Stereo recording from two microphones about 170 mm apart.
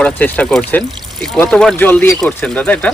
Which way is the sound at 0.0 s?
10° left (ahead or behind).